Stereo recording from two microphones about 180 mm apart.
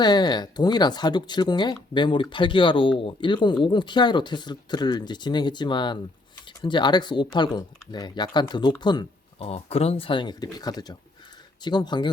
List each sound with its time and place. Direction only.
0.0 s speech: 25° left (ahead or behind)